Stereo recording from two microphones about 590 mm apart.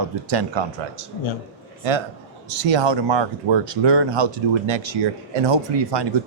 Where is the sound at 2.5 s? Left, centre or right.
Right.